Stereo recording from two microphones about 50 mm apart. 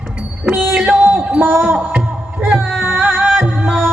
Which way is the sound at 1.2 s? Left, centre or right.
Right.